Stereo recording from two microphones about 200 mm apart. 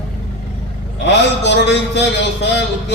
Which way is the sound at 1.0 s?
60° left (ahead or behind).